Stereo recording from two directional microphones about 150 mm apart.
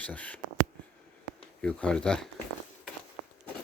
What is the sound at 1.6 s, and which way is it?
Speech, 5° left (ahead or behind).